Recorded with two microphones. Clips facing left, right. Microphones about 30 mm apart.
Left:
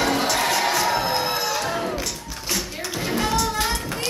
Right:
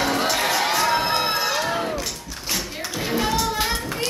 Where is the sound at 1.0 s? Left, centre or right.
Right.